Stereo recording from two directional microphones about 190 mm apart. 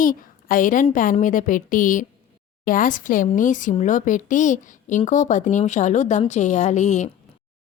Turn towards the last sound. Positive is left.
turn(degrees=40)  # may be behind; listen again after turning